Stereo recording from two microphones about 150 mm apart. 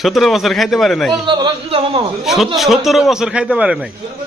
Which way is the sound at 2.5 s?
Centre (ahead or behind).